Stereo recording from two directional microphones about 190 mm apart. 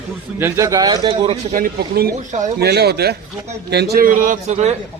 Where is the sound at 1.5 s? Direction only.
50° right (ahead or behind).